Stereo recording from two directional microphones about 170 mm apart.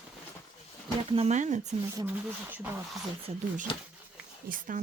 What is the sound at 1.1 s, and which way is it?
Speech, 40° right (ahead or behind).